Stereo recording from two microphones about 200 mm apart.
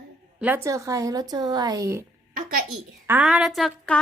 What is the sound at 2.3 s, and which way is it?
Speech, 50° right (ahead or behind).